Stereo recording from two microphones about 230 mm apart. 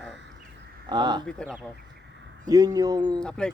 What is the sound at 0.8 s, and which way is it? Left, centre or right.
Speech, centre.